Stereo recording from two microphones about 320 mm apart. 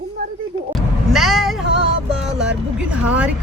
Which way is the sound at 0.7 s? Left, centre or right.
Centre.